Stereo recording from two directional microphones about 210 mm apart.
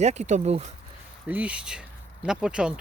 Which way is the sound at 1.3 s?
5° right (ahead or behind).